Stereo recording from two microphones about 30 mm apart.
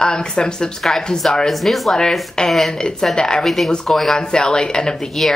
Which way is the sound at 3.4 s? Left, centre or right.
Centre.